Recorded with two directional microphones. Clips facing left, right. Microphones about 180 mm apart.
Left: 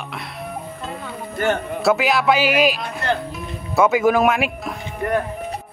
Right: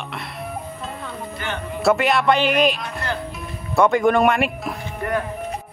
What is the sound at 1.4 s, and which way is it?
Speech, 45° left (ahead or behind).